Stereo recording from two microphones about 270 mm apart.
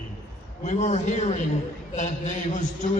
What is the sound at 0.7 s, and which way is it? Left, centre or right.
A man's voice, left.